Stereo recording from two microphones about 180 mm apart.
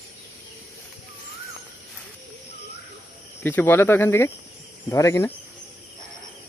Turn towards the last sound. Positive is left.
turn(degrees=15)  # may be behind; listen again after turning